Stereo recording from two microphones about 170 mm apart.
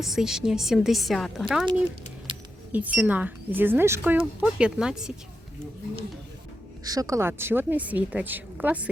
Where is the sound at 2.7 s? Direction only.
10° right (ahead or behind).